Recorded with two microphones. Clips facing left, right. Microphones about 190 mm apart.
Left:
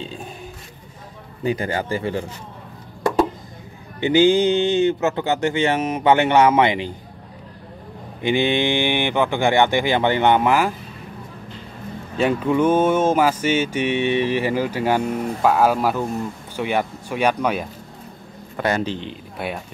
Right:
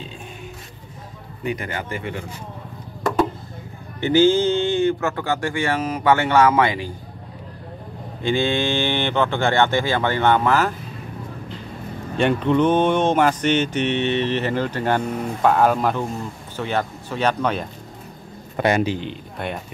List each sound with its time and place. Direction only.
1.4 s speech: 30° left (ahead or behind)
4.0 s speech: 15° left (ahead or behind)
8.2 s speech: 15° left (ahead or behind)
12.2 s speech: 5° left (ahead or behind)
18.6 s speech: 15° right (ahead or behind)
18.9 s speech: 5° left (ahead or behind)